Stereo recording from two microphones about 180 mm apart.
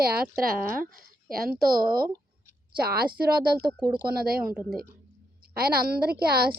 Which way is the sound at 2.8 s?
60° right (ahead or behind).